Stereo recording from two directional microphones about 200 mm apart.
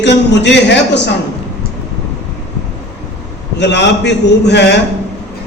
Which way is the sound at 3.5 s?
60° left (ahead or behind).